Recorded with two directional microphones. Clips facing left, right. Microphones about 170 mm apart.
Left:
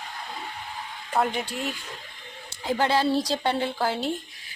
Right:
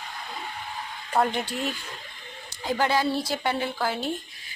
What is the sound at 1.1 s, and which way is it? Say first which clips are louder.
Speech: right 1 dB; 5° left (ahead or behind).